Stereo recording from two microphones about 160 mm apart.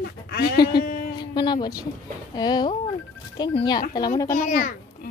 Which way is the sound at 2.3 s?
25° left (ahead or behind).